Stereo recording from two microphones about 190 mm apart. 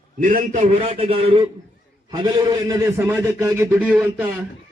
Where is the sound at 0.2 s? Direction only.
45° right (ahead or behind); by 3.9 s 10° right (ahead or behind).